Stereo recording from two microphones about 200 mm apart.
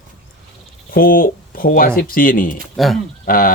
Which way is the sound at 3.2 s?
45° left (ahead or behind).